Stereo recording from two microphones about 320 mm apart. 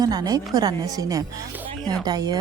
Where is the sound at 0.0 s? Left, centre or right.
Centre.